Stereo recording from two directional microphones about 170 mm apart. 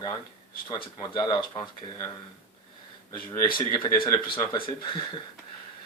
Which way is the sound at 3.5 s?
25° left (ahead or behind).